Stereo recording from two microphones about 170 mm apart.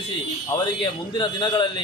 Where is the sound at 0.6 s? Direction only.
25° left (ahead or behind).